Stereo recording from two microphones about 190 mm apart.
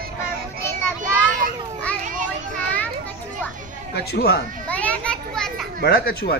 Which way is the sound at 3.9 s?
55° left (ahead or behind).